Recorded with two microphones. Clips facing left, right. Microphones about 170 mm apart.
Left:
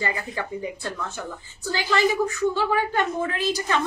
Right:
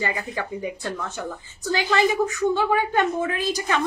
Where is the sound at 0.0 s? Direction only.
15° right (ahead or behind).